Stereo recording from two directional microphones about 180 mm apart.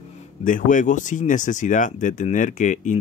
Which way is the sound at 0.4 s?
45° left (ahead or behind).